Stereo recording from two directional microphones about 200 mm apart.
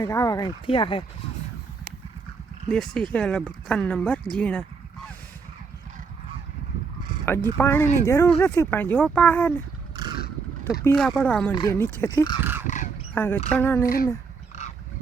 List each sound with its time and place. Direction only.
0.0 s speech: 15° left (ahead or behind)
2.6 s speech: 5° left (ahead or behind)
7.3 s speech: 10° left (ahead or behind)
10.6 s speech: 15° left (ahead or behind)
10.9 s speech: centre (ahead or behind); by 12.4 s 20° left (ahead or behind)
12.4 s a sound: 10° right (ahead or behind)
12.6 s squawk: 40° left (ahead or behind)
13.1 s speech: 10° left (ahead or behind)
13.8 s speech: 45° left (ahead or behind)
14.5 s a sound: 35° left (ahead or behind)